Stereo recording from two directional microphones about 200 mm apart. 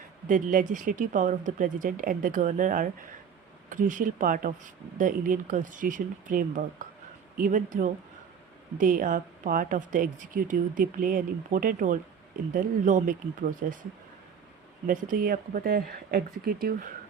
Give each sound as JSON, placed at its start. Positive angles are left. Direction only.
{"t": 0.3, "sound": "a woman's voice", "side_deg": -40}
{"t": 14.8, "sound": "a woman's voice", "side_deg": -40}